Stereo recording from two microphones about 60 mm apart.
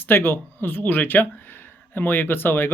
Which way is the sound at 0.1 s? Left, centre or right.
Left.